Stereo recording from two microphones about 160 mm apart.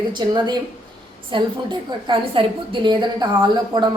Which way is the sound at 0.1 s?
30° right (ahead or behind).